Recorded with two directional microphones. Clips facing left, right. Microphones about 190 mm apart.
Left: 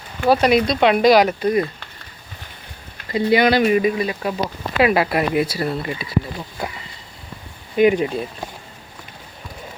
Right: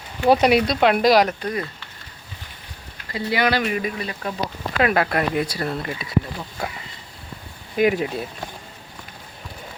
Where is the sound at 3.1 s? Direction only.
15° left (ahead or behind).